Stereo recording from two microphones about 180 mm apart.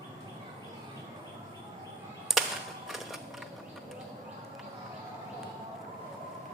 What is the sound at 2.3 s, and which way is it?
Music, centre (ahead or behind).